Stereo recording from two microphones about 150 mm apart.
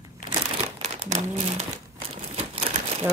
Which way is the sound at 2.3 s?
45° right (ahead or behind).